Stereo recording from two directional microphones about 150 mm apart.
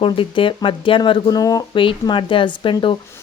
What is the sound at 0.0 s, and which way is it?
Speech, 35° left (ahead or behind).